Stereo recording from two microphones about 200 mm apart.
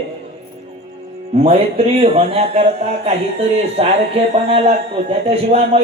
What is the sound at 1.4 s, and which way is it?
Music, 30° right (ahead or behind).